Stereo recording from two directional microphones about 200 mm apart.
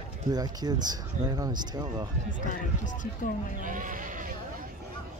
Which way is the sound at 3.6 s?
40° right (ahead or behind).